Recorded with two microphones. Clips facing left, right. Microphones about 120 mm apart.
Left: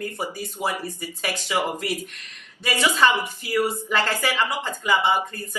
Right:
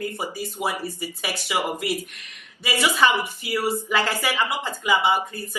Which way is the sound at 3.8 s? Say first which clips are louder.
Even; 10° right (ahead or behind).